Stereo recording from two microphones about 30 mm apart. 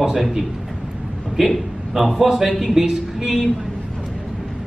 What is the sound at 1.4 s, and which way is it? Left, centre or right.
A man's voice, centre.